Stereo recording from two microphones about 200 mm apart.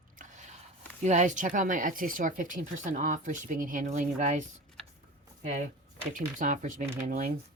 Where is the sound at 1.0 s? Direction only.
35° right (ahead or behind).